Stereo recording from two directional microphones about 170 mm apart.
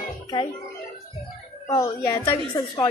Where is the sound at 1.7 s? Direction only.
15° left (ahead or behind).